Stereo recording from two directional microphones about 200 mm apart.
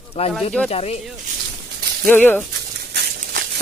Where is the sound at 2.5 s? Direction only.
55° right (ahead or behind).